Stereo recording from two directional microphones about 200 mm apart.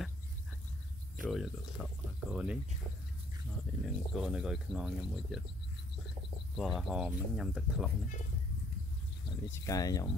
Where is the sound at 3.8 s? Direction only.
Centre (ahead or behind).